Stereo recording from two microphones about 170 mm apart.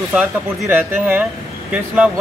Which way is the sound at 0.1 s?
10° right (ahead or behind).